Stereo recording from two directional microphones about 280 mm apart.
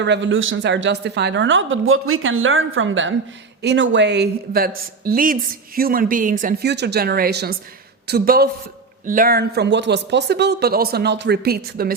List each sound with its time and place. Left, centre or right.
0.0 s a woman's voice: right